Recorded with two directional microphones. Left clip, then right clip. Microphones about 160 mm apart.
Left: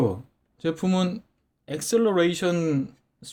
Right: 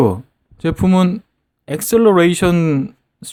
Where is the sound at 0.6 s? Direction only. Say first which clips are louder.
Right 9 dB; 30° right (ahead or behind).